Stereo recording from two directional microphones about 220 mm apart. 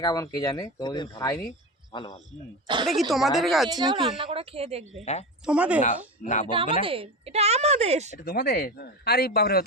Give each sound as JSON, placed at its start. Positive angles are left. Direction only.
{"t": 0.0, "sound": "speech", "side_deg": 15}
{"t": 2.8, "sound": "a woman's voice", "side_deg": 0}
{"t": 3.7, "sound": "a woman's voice", "side_deg": -20}
{"t": 5.5, "sound": "a woman's voice", "side_deg": -5}
{"t": 6.2, "sound": "speech", "side_deg": 35}
{"t": 6.5, "sound": "a woman's voice", "side_deg": -25}
{"t": 8.2, "sound": "speech", "side_deg": 45}